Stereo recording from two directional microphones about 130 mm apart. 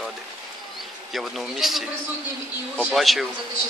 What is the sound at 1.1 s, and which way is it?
Speech, centre (ahead or behind).